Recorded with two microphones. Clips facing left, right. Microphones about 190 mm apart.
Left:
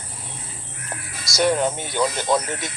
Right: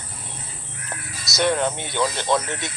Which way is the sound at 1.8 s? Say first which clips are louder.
Left 1 dB; 40° left (ahead or behind).